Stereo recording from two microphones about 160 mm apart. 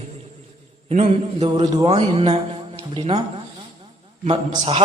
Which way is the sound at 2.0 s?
40° right (ahead or behind).